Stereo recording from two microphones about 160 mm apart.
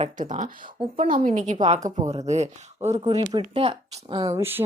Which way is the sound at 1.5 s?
35° right (ahead or behind).